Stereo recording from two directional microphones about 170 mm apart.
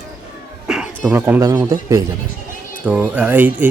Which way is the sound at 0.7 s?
5° right (ahead or behind).